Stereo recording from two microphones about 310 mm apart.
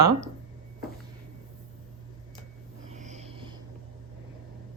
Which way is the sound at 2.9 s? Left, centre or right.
Right.